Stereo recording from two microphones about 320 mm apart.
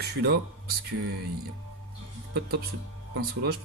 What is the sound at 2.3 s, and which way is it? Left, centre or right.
Speech, right.